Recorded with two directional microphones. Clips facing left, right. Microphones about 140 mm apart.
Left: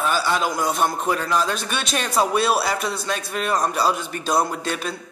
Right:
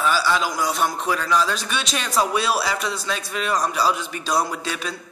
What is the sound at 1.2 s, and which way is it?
A man's voice, 50° left (ahead or behind).